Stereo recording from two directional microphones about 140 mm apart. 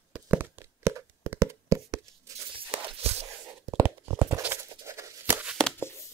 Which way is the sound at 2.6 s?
40° right (ahead or behind).